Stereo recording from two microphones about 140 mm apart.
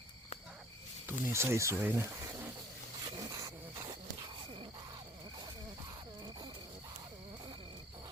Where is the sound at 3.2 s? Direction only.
25° right (ahead or behind).